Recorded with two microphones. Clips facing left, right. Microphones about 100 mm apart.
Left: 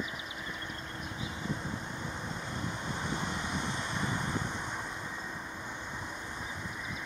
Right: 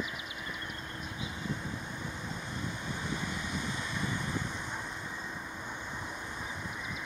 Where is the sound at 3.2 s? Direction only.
25° left (ahead or behind).